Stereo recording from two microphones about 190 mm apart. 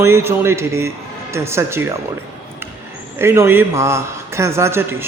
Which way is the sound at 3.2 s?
15° right (ahead or behind).